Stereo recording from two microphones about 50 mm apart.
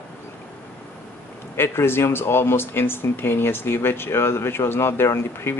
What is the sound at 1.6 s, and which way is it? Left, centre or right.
Speech, left.